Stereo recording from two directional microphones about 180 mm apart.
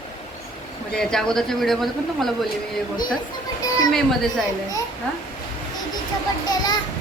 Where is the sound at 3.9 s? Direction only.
Centre (ahead or behind).